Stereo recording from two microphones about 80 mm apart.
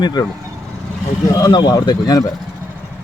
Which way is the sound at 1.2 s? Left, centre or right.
Left.